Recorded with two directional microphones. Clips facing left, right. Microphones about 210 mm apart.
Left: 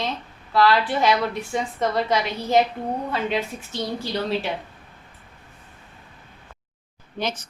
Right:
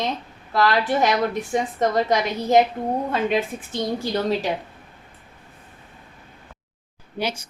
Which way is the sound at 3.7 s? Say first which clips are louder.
Right 3 dB; 45° right (ahead or behind).